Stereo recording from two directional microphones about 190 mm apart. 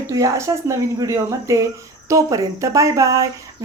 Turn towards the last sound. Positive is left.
turn(degrees=-15)  # may be behind; listen again after turning